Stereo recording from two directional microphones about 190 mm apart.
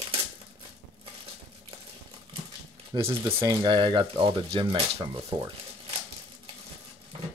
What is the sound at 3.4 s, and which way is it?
Speech, 20° right (ahead or behind).